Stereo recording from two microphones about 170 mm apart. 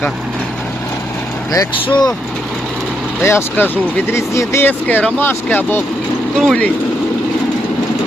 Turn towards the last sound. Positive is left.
turn(degrees=5)  # may be behind; listen again after turning